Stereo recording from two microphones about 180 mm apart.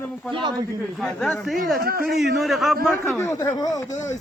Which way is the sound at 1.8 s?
55° right (ahead or behind).